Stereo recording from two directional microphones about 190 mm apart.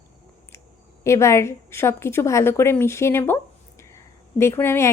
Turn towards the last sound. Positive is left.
turn(degrees=15)  # may be behind; listen again after turning